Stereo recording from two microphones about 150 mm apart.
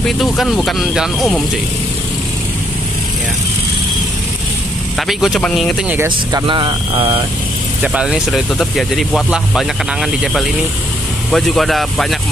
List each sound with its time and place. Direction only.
0.2 s speech: centre (ahead or behind)
4.9 s speech: centre (ahead or behind)
6.3 s speech: 35° right (ahead or behind)
7.8 s speech: 5° right (ahead or behind)
11.3 s speech: centre (ahead or behind)